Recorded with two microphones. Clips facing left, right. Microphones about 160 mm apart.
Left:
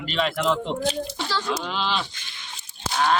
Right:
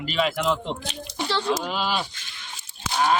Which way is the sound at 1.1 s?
25° right (ahead or behind).